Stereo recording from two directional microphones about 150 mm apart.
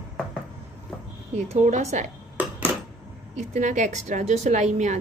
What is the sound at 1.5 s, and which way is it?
Speech, 50° right (ahead or behind).